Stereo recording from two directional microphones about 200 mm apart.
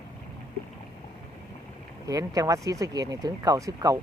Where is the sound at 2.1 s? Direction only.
15° right (ahead or behind).